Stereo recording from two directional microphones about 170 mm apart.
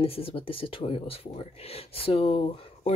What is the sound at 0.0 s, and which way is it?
Speech, 35° left (ahead or behind).